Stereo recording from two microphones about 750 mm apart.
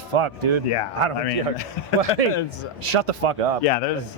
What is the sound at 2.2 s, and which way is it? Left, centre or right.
A man's voice, right.